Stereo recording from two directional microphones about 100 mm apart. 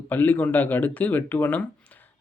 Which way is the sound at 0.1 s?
20° left (ahead or behind).